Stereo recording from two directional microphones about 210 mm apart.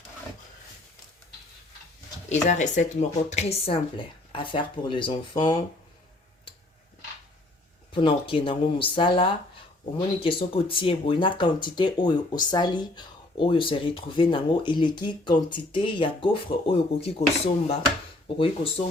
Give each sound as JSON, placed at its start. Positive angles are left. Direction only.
{"t": 2.3, "sound": "speech", "side_deg": 35}
{"t": 7.9, "sound": "speech", "side_deg": 25}